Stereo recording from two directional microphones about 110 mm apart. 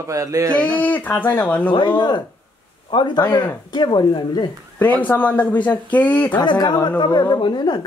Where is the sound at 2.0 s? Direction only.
45° left (ahead or behind).